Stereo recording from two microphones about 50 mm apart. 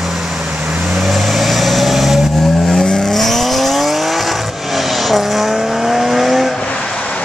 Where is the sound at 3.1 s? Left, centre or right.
Centre.